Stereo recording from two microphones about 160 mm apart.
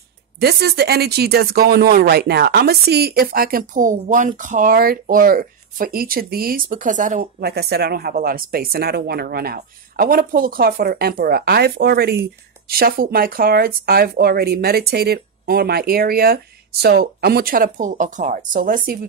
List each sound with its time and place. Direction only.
0.4 s speech: 85° right; by 18.9 s 65° right (ahead or behind)